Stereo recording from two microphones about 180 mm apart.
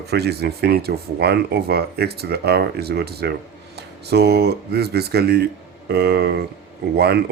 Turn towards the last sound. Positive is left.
turn(degrees=-60)  # may be behind; listen again after turning